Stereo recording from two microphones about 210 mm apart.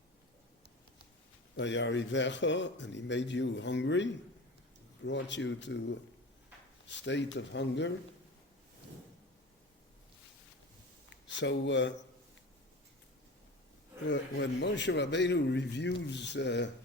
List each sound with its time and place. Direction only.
1.5 s a man's voice: 60° left (ahead or behind)
11.1 s speech: 60° left (ahead or behind)
14.1 s a man's voice: 55° left (ahead or behind)